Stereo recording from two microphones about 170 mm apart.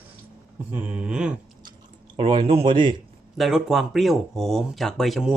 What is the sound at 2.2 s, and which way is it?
Speech, 30° right (ahead or behind).